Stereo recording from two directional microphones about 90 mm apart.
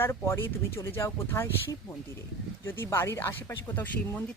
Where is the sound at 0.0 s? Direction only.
30° left (ahead or behind).